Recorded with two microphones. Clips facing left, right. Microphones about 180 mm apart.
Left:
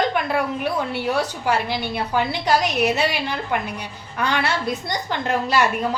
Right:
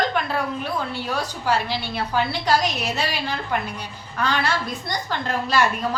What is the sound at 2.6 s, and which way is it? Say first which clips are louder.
Speech: left 5 dB; 65° left (ahead or behind).